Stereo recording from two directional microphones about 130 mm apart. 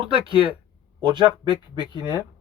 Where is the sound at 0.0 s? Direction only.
40° right (ahead or behind).